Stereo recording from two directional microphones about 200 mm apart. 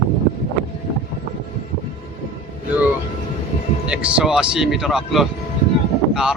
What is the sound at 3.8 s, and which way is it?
Speech, 5° right (ahead or behind).